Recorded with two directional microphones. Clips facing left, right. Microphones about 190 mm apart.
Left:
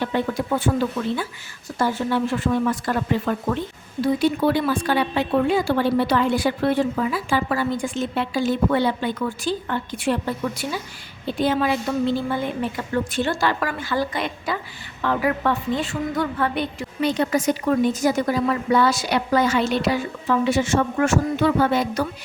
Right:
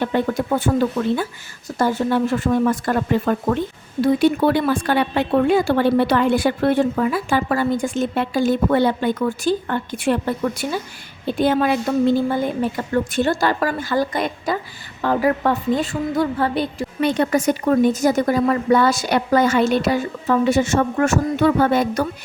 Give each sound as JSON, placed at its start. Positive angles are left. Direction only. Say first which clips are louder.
{"t": 0.0, "sound": "a woman's voice", "louder": "right 3 dB", "side_deg": -45}
{"t": 17.0, "sound": "a woman's voice", "louder": "right 3 dB", "side_deg": -55}